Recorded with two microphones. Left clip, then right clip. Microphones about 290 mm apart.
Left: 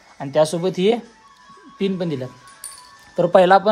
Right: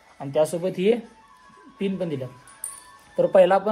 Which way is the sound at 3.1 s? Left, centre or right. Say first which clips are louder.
Left 4 dB; left.